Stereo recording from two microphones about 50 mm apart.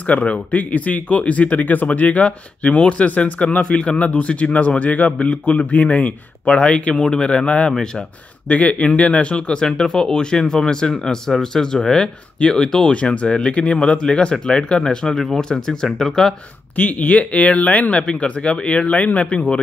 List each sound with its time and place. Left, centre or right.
0.1 s speech: left; by 16.3 s centre
16.7 s speech: left